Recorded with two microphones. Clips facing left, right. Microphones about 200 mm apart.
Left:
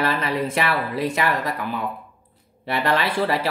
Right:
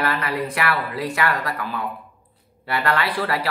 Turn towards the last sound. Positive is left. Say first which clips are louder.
# left 2 dB
turn(degrees=25)  # may be behind; listen again after turning